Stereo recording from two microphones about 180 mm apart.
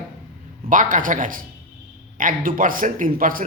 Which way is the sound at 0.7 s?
45° right (ahead or behind).